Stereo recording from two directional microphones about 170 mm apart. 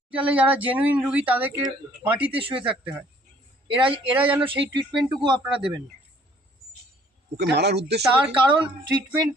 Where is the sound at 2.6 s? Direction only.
10° right (ahead or behind).